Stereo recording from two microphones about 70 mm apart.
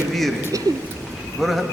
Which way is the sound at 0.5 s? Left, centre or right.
Right.